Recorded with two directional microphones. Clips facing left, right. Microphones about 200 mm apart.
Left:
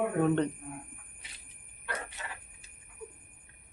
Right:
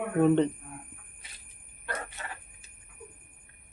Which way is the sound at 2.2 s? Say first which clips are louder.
Right 2 dB; 50° right (ahead or behind).